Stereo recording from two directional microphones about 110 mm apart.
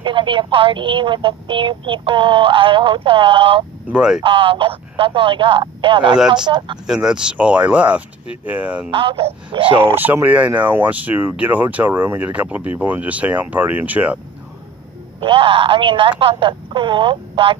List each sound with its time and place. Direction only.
0.0 s speech: 45° right (ahead or behind)
3.9 s speech: 5° right (ahead or behind)
4.2 s speech: 50° right (ahead or behind)
6.1 s speech: 5° right (ahead or behind)
6.4 s speech: 40° right (ahead or behind)
6.9 s speech: 5° right (ahead or behind)
8.9 s speech: 55° right (ahead or behind)
9.9 s speech: 15° right (ahead or behind)
15.2 s speech: 50° right (ahead or behind)